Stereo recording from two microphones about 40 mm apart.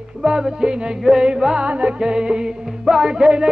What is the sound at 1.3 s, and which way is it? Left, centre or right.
Music, centre.